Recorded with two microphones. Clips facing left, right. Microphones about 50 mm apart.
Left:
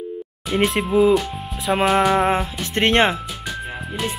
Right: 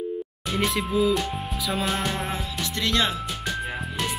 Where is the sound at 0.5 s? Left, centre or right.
Left.